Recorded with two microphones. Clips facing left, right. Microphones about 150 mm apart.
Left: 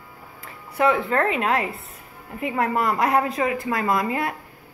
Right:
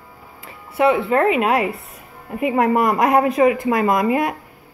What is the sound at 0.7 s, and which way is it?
A woman's voice, 5° right (ahead or behind).